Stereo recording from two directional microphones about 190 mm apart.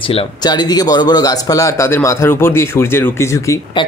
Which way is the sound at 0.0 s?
30° left (ahead or behind).